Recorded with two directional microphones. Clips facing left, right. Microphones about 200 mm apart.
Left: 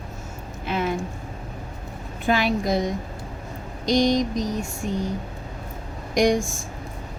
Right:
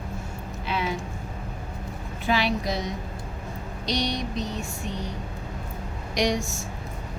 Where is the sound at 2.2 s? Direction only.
50° left (ahead or behind).